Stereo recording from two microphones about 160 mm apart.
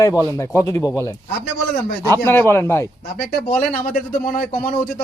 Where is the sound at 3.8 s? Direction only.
65° left (ahead or behind).